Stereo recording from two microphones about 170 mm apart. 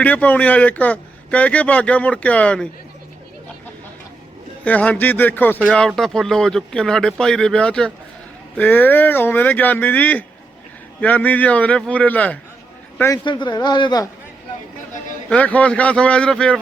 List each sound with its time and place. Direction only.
0.0 s speech: 10° left (ahead or behind)
4.6 s speech: 10° left (ahead or behind)
13.2 s speech: 25° left (ahead or behind)
15.3 s speech: 10° left (ahead or behind)